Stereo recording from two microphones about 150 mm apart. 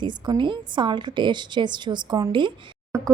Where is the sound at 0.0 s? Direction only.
30° right (ahead or behind).